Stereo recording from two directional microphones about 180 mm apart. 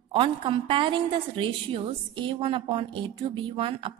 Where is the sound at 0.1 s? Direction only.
30° right (ahead or behind).